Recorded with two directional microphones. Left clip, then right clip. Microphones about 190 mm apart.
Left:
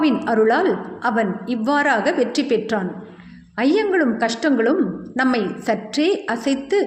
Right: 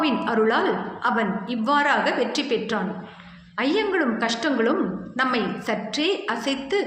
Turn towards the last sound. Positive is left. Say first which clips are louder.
# left 4 dB
turn(degrees=50)  # may be behind; listen again after turning